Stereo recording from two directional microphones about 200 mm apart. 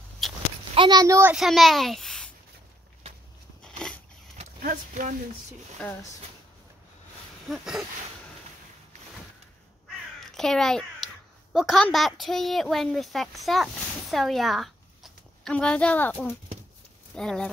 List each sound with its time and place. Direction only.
0.2 s a sound: centre (ahead or behind)
0.7 s speech: 20° right (ahead or behind)
1.3 s speech: centre (ahead or behind)
3.6 s a sound: 5° left (ahead or behind)
4.6 s speech: 45° right (ahead or behind)
5.8 s speech: 5° left (ahead or behind)
7.4 s speech: centre (ahead or behind)
10.3 s a child's voice: centre (ahead or behind)